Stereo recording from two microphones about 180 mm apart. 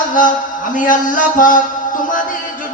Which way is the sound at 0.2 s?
50° left (ahead or behind).